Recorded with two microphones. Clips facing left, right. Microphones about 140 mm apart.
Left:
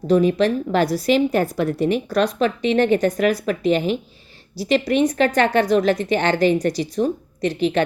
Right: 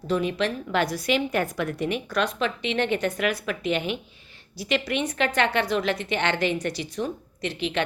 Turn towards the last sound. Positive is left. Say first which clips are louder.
# left 8 dB
turn(degrees=40)  # may be behind; listen again after turning